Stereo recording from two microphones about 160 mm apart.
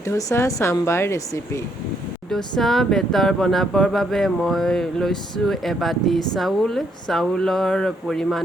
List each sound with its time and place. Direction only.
0.1 s speech: 20° left (ahead or behind)
2.3 s speech: centre (ahead or behind)